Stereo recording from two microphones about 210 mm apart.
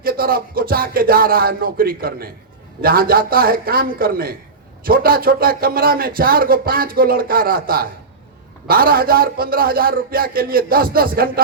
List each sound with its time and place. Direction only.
0.0 s speech: 45° right (ahead or behind)